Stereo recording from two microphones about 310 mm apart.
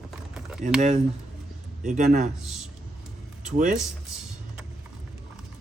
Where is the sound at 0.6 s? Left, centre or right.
Right.